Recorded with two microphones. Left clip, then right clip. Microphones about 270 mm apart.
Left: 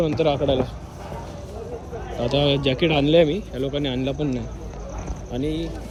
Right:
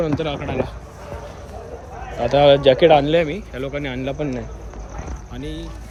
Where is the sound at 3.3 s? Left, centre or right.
Left.